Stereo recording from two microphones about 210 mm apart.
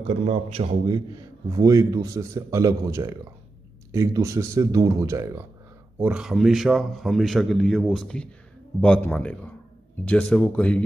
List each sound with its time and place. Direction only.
0.0 s a man's voice: 30° right (ahead or behind); by 10.8 s 5° left (ahead or behind)